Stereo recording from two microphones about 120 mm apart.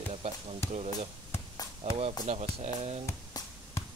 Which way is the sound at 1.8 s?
55° right (ahead or behind).